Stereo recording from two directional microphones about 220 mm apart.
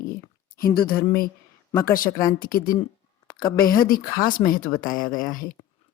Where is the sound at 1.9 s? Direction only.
40° left (ahead or behind).